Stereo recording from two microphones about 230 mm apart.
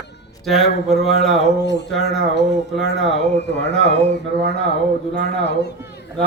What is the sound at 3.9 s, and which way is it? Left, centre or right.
Speech, left.